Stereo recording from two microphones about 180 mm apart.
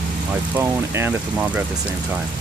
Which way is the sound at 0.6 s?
10° right (ahead or behind).